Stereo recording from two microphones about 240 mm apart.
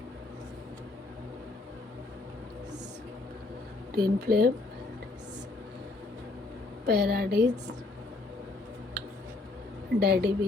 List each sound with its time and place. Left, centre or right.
3.9 s speech: right
6.8 s speech: right
10.0 s speech: right